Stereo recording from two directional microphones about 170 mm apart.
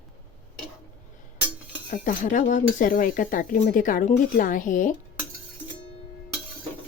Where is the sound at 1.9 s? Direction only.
50° left (ahead or behind).